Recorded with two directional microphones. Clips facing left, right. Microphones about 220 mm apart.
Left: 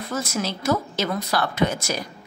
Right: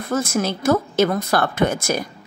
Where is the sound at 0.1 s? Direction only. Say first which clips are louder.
Right 6 dB; 50° right (ahead or behind).